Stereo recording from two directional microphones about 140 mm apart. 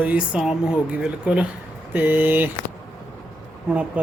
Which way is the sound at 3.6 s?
10° right (ahead or behind).